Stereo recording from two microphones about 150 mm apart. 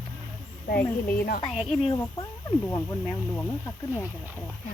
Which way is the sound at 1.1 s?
75° left (ahead or behind).